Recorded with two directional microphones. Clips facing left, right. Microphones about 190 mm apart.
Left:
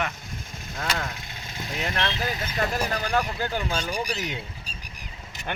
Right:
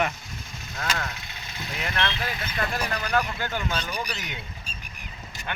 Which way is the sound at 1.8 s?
30° left (ahead or behind).